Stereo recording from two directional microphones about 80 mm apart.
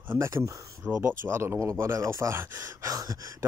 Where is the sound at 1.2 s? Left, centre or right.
Right.